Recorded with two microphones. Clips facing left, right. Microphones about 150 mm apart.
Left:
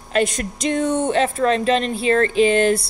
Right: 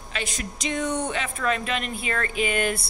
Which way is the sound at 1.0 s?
40° left (ahead or behind).